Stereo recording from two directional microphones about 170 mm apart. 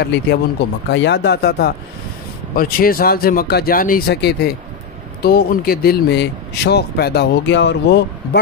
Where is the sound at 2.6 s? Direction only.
60° left (ahead or behind).